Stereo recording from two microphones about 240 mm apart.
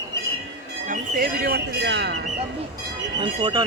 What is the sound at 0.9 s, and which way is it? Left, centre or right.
Music, right.